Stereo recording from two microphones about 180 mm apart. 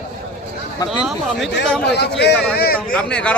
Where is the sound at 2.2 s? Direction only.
65° left (ahead or behind).